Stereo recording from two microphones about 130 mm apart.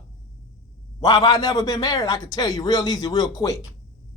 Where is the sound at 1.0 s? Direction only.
35° left (ahead or behind).